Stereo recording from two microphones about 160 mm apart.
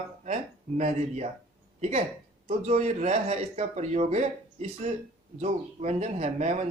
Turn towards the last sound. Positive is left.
turn(degrees=-45)  # may be behind; listen again after turning